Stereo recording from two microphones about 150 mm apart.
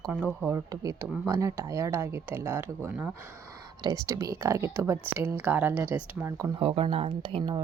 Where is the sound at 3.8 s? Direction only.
25° right (ahead or behind).